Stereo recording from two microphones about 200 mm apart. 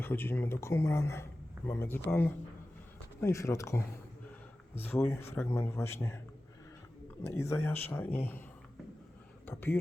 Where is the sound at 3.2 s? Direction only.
15° left (ahead or behind).